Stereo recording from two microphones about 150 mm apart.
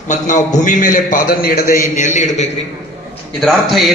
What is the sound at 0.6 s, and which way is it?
A man's voice, 60° left (ahead or behind).